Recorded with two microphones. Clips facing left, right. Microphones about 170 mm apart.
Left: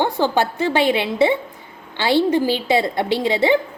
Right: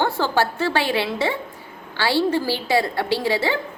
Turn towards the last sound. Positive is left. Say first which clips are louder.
# left 4 dB
turn(degrees=20)  # may be behind; listen again after turning